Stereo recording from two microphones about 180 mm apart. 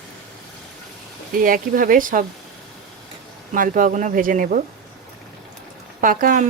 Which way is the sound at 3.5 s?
50° right (ahead or behind).